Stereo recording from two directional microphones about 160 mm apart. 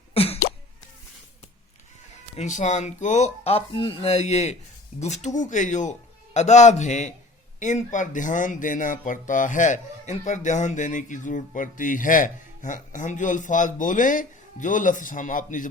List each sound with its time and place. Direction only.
0.1 s cough: 40° left (ahead or behind)
2.3 s speech: 45° left (ahead or behind)
3.7 s chopping: 30° left (ahead or behind)
4.9 s speech: 45° left (ahead or behind)